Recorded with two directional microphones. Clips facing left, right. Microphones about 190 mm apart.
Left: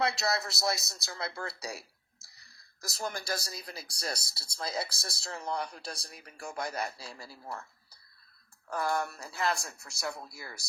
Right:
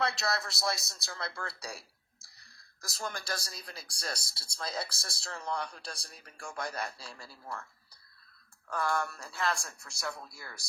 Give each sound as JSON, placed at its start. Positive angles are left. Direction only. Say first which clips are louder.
{"t": 0.0, "sound": "speech", "louder": "left 2 dB", "side_deg": 20}
{"t": 3.7, "sound": "speech", "louder": "left 3 dB", "side_deg": 5}
{"t": 4.0, "sound": "speech", "louder": "left 2 dB", "side_deg": 20}
{"t": 8.6, "sound": "speech", "louder": "left 1 dB", "side_deg": 20}